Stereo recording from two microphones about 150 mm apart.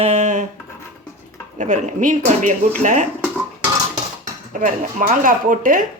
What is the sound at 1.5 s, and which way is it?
Speech, 60° right (ahead or behind).